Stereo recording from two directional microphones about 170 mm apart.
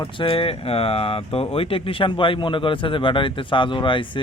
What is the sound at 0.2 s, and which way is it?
Speech, 35° left (ahead or behind).